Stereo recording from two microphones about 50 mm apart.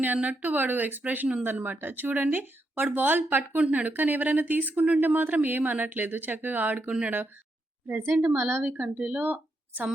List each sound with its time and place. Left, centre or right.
0.0 s speech: right
7.9 s a woman's voice: right
8.7 s speech: right